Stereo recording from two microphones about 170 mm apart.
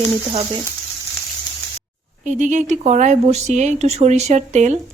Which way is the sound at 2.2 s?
45° right (ahead or behind).